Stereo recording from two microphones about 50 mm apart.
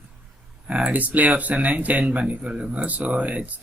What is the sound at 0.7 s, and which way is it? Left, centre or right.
Speech, right.